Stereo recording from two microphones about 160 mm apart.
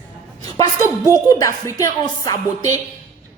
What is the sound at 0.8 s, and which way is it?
A woman's voice, 20° left (ahead or behind).